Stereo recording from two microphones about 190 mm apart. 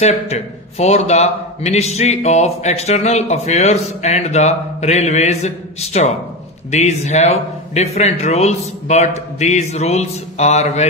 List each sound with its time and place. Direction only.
0.0 s a man's voice: 35° left (ahead or behind)